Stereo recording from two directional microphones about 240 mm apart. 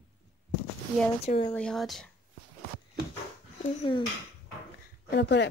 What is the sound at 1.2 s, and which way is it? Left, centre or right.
Speech, left.